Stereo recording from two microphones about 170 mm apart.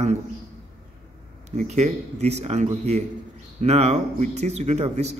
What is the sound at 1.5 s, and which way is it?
Speech, 40° right (ahead or behind).